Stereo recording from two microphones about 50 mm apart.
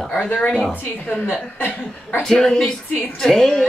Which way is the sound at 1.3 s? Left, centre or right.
Left.